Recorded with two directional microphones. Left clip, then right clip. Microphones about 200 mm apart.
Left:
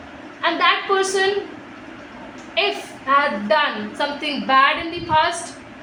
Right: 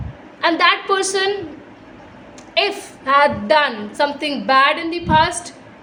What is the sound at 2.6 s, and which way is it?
A woman's voice, 60° right (ahead or behind).